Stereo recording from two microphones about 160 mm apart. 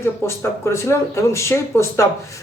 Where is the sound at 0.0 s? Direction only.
15° left (ahead or behind).